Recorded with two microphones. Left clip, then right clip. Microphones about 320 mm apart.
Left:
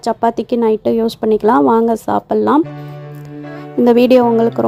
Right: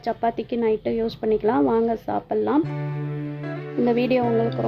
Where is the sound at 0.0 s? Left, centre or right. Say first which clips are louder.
Left 9 dB; left.